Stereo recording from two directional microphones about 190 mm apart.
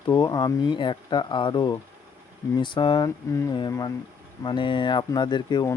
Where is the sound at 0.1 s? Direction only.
25° left (ahead or behind).